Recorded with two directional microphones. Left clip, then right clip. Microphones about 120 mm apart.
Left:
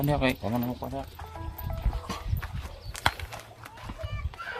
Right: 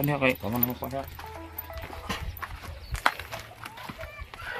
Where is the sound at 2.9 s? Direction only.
55° right (ahead or behind).